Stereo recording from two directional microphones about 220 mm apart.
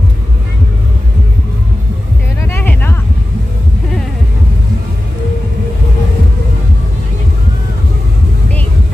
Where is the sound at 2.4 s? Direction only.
10° left (ahead or behind).